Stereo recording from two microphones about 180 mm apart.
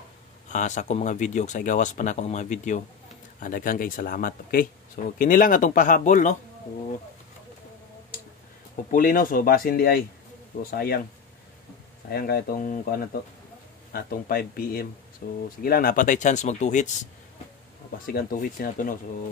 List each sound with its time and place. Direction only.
0.5 s speech: 40° left (ahead or behind)
8.9 s speech: 50° left (ahead or behind)
12.1 s speech: 60° left (ahead or behind); by 16.9 s 40° left (ahead or behind)
18.0 s speech: 50° left (ahead or behind)